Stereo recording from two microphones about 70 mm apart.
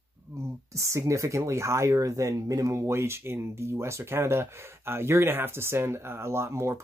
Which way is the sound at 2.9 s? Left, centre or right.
Right.